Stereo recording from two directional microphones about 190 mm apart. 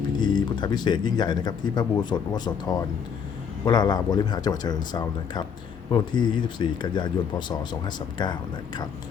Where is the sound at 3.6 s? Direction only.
20° left (ahead or behind).